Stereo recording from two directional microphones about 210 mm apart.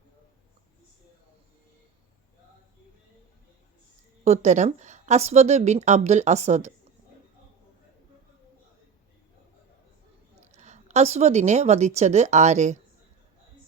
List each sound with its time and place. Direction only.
4.2 s a woman's voice: 35° right (ahead or behind)
10.4 s a woman's voice: 35° right (ahead or behind)